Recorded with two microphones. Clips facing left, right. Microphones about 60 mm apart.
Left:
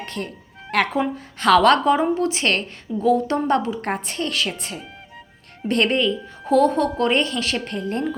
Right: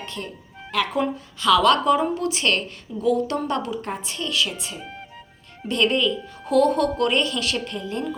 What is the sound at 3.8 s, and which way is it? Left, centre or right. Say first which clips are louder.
A woman's voice: left 4 dB; left.